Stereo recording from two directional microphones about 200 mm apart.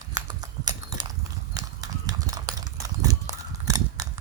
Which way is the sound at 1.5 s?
20° right (ahead or behind).